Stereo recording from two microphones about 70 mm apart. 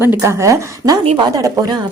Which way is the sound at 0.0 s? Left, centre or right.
Right.